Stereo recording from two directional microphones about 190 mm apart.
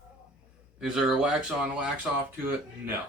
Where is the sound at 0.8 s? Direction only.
5° right (ahead or behind).